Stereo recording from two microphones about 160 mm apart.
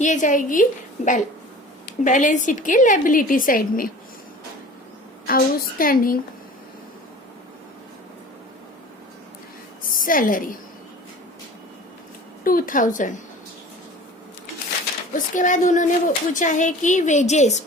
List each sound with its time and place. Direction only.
0.0 s a woman's voice: 50° left (ahead or behind)
5.2 s a woman's voice: 65° left (ahead or behind)
9.9 s a woman's voice: 60° left (ahead or behind)
12.5 s a woman's voice: 60° left (ahead or behind)
15.1 s speech: 55° left (ahead or behind)